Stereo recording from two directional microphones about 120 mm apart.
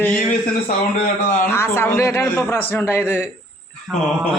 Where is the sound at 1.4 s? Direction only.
20° left (ahead or behind).